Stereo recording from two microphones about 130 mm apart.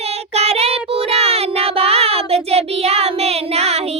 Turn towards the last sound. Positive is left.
turn(degrees=-55)  # may be behind; listen again after turning